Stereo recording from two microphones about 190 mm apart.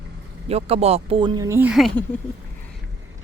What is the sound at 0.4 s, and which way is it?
Speech, 30° right (ahead or behind).